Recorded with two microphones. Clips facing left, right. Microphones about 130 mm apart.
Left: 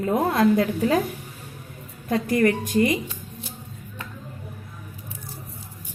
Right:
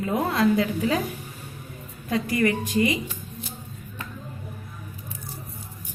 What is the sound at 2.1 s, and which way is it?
Speech, 50° left (ahead or behind).